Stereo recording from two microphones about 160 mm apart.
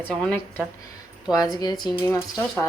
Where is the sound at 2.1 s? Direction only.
20° left (ahead or behind).